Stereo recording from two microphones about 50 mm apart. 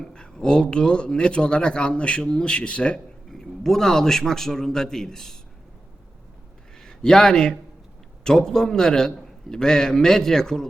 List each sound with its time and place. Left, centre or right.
0.0 s speech: centre
3.2 s a man's voice: centre
6.7 s a sound: centre
8.2 s a man's voice: centre